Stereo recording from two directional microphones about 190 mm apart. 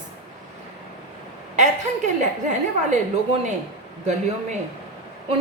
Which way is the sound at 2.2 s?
40° right (ahead or behind).